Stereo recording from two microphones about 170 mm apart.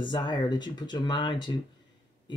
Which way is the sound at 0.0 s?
25° left (ahead or behind).